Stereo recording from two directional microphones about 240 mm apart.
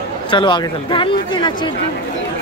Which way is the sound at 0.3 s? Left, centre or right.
Centre.